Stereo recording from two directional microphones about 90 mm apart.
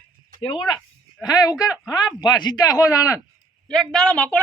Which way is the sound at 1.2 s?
45° left (ahead or behind).